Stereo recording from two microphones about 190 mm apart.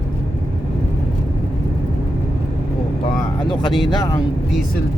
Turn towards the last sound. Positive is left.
turn(degrees=25)  # may be behind; listen again after turning